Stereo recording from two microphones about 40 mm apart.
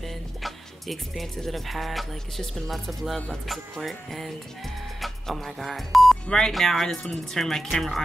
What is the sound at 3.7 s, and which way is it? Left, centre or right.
Speech, centre.